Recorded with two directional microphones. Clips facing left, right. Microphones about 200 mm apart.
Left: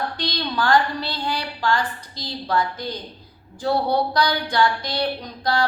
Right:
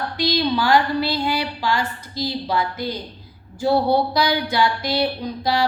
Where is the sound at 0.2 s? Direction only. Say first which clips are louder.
Right 10 dB; 10° right (ahead or behind).